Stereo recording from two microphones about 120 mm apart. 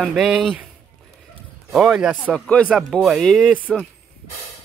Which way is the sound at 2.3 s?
5° left (ahead or behind).